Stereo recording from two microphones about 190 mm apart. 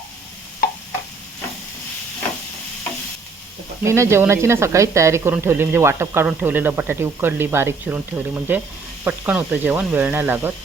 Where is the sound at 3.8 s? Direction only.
15° right (ahead or behind).